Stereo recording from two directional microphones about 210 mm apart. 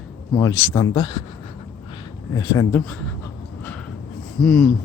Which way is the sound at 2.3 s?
15° left (ahead or behind).